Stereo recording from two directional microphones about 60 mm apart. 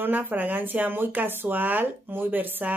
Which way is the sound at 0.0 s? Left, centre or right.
Right.